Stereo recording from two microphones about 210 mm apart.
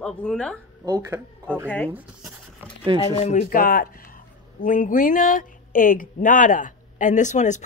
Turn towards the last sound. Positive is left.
turn(degrees=35)  # may be behind; listen again after turning